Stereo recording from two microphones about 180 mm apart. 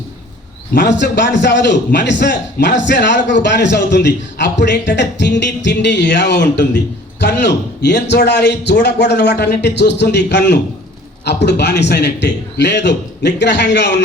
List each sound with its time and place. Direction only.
0.8 s a man's voice: 75° left (ahead or behind)